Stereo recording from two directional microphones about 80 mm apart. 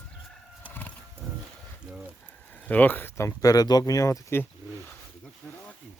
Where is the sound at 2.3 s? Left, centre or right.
Centre.